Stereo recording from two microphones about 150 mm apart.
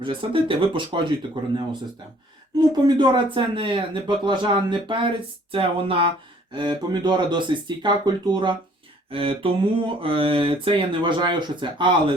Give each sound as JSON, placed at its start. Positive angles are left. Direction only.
{"t": 0.0, "sound": "speech", "side_deg": -35}
{"t": 2.7, "sound": "speech", "side_deg": -30}
{"t": 9.0, "sound": "a sound", "side_deg": -35}
{"t": 10.0, "sound": "speech", "side_deg": -35}